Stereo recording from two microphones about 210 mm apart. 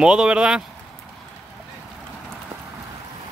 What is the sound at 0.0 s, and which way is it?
Speech, 5° right (ahead or behind).